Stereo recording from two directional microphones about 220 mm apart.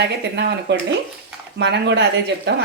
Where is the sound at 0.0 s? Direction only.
50° right (ahead or behind).